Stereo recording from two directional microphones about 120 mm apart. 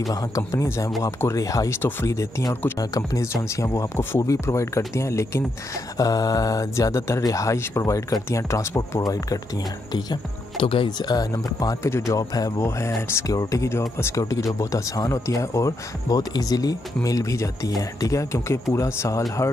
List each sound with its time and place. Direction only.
0.1 s speech: 30° left (ahead or behind)
10.6 s speech: 45° left (ahead or behind); by 19.2 s 25° left (ahead or behind)